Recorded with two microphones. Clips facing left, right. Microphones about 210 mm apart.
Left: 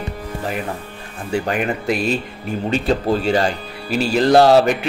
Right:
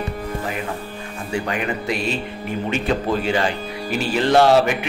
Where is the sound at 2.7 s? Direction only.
35° left (ahead or behind).